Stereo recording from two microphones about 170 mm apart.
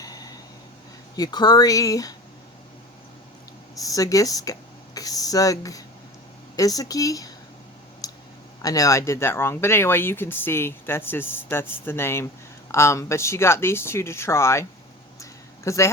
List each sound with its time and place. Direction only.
0.0 s a sound: 20° left (ahead or behind)
1.1 s speech: 25° left (ahead or behind)
3.8 s speech: 20° left (ahead or behind)
8.0 s clicking: 20° left (ahead or behind)
8.6 s speech: 20° left (ahead or behind)
15.2 s a sound: 15° left (ahead or behind)